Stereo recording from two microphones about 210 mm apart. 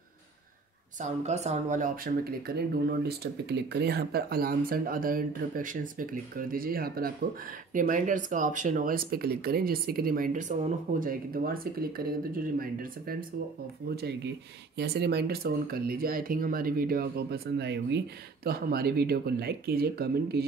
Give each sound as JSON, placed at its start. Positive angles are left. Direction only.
{"t": 1.2, "sound": "speech", "side_deg": -30}
{"t": 14.8, "sound": "speech", "side_deg": -50}